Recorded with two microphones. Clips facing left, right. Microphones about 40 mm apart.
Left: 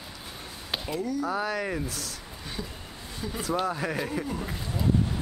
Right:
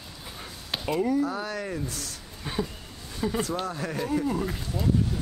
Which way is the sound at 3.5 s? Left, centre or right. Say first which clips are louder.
Left 3 dB; centre.